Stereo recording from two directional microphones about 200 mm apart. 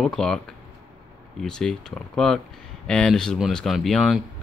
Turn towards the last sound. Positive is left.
turn(degrees=0)  # may be behind; listen again after turning